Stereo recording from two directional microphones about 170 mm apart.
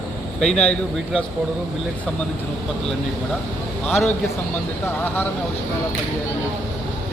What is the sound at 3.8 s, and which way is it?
Speech, 10° left (ahead or behind).